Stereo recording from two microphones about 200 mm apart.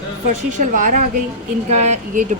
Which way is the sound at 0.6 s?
40° right (ahead or behind).